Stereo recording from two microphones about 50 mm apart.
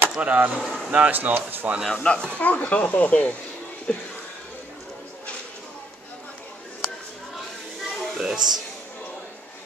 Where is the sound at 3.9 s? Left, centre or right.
Centre.